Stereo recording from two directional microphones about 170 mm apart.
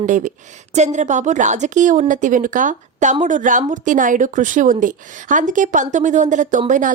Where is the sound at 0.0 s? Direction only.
45° right (ahead or behind).